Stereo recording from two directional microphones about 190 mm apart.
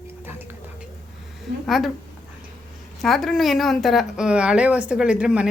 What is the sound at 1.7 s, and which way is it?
Speech, centre (ahead or behind).